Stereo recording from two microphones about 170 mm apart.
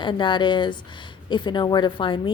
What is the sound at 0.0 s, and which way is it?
A woman's voice, 30° left (ahead or behind).